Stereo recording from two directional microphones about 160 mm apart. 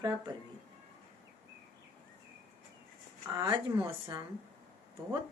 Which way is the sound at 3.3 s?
25° right (ahead or behind).